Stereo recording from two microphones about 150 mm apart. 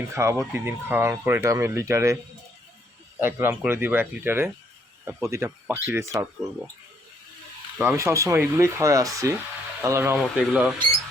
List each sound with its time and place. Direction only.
0.1 s speech: 20° right (ahead or behind)
3.2 s speech: 15° right (ahead or behind)
7.8 s speech: 20° right (ahead or behind); by 10.8 s 5° right (ahead or behind)